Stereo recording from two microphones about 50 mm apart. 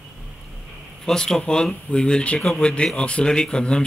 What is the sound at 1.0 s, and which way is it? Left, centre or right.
Speech, centre.